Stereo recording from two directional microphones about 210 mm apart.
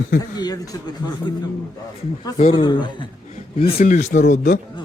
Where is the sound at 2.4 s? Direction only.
25° left (ahead or behind).